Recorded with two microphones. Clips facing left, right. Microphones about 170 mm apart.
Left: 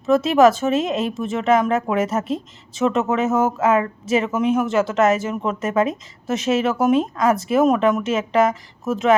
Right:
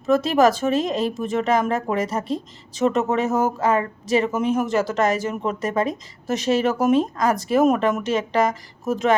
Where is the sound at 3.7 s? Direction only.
35° right (ahead or behind).